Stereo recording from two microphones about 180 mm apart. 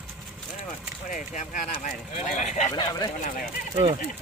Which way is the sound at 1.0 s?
45° left (ahead or behind).